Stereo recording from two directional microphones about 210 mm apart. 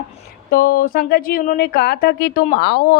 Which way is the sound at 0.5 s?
45° left (ahead or behind).